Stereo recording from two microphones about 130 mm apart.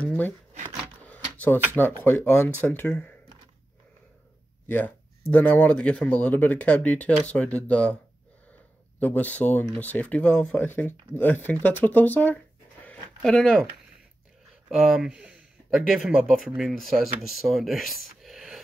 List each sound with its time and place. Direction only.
0.0 s shuffling cards: 10° left (ahead or behind)
1.0 s drawer open or close: 10° left (ahead or behind)
1.7 s speech: 15° left (ahead or behind)
4.6 s speech: 15° left (ahead or behind)
9.0 s speech: 15° left (ahead or behind)
14.7 s speech: centre (ahead or behind)